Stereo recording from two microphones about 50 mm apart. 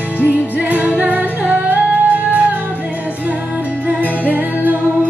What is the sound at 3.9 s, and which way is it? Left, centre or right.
Music, right.